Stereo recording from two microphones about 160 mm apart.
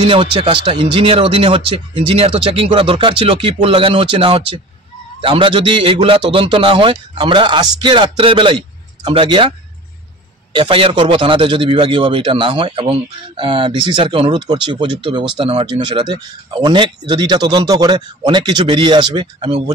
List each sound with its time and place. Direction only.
0.0 s a man's voice: 30° right (ahead or behind)
10.5 s a man's voice: 30° right (ahead or behind)